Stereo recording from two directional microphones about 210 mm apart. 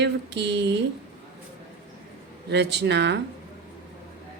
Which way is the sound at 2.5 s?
55° right (ahead or behind).